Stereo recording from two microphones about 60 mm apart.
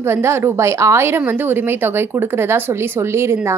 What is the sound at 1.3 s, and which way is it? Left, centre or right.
A woman's voice, right.